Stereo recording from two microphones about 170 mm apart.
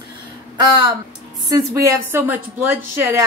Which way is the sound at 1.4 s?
20° right (ahead or behind).